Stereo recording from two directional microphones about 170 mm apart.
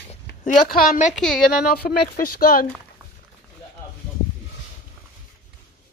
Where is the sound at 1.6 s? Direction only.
65° left (ahead or behind).